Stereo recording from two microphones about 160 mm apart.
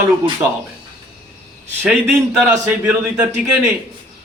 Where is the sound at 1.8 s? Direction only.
10° right (ahead or behind).